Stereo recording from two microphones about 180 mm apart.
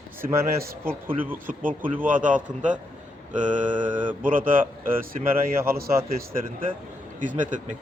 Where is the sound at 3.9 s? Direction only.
10° right (ahead or behind).